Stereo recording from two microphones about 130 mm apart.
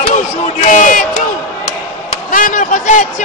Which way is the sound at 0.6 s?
75° left (ahead or behind).